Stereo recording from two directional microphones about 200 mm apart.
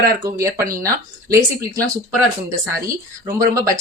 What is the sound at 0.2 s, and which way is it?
Speech, 15° right (ahead or behind).